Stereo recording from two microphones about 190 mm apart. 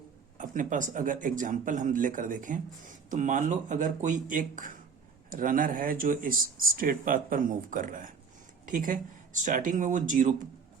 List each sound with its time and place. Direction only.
0.3 s speech: 45° right (ahead or behind)